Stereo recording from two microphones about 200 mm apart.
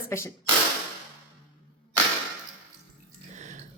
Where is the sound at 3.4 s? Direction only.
35° right (ahead or behind).